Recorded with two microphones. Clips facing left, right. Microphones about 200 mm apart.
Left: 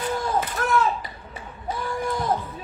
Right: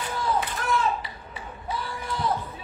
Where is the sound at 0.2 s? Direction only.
45° left (ahead or behind).